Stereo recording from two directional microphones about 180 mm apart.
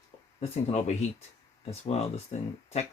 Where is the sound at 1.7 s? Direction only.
35° left (ahead or behind).